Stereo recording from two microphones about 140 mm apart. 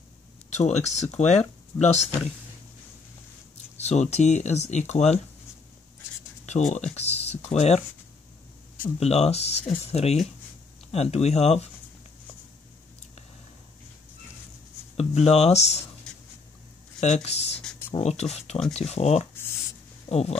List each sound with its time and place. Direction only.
0.5 s speech: 55° left (ahead or behind)
3.8 s speech: 55° left (ahead or behind)
6.4 s speech: 55° left (ahead or behind)
9.0 s speech: 50° left (ahead or behind)
15.0 s speech: 50° left (ahead or behind)
17.0 s speech: 50° left (ahead or behind)